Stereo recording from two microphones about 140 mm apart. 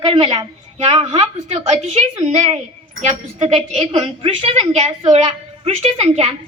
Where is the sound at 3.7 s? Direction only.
45° right (ahead or behind).